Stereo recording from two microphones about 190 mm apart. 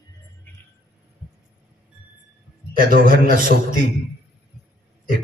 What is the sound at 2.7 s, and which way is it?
A man's voice, 50° right (ahead or behind).